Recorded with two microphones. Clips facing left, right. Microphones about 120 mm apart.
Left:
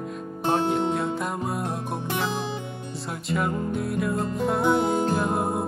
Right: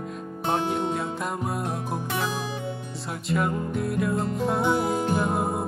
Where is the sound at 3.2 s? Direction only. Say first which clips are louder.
Even; centre (ahead or behind).